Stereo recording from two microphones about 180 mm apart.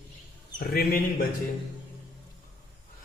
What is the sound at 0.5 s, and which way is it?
Speech, 55° left (ahead or behind).